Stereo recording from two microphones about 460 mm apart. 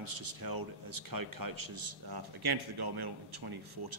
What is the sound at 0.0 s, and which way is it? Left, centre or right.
Speech, right.